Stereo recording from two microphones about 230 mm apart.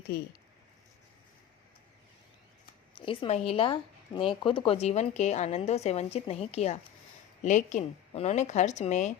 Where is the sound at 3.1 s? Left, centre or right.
Left.